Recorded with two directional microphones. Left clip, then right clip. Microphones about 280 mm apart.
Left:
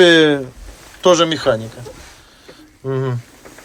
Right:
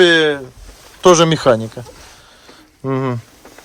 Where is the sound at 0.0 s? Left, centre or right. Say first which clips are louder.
Left 1 dB; centre.